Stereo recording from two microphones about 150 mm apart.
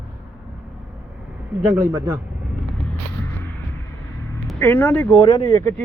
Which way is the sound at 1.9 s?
20° right (ahead or behind).